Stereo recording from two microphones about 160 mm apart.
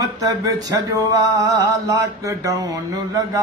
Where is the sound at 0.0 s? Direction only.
20° right (ahead or behind).